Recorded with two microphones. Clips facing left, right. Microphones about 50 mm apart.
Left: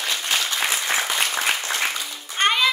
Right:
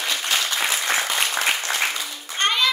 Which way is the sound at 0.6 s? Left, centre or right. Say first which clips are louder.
Right 1 dB; centre.